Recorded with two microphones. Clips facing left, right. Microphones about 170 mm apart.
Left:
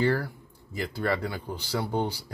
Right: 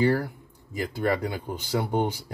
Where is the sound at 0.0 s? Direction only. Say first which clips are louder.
Right 3 dB; 15° right (ahead or behind).